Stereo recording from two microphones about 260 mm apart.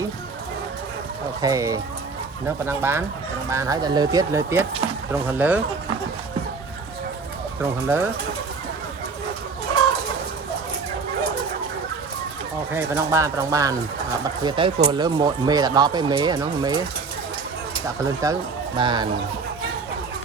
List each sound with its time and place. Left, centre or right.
1.4 s speech: centre
7.6 s speech: centre
12.7 s speech: centre
17.8 s speech: centre